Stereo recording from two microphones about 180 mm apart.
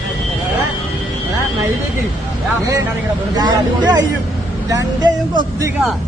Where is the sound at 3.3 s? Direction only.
20° right (ahead or behind).